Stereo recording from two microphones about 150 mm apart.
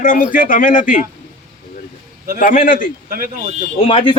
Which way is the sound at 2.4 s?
65° left (ahead or behind).